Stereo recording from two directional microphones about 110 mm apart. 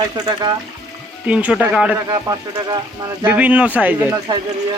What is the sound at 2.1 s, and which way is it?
Speech, 35° right (ahead or behind).